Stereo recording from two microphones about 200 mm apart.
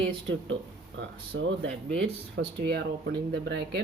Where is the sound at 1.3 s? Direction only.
65° right (ahead or behind).